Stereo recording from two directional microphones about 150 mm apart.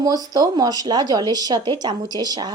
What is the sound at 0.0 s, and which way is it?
A child's voice, 25° right (ahead or behind).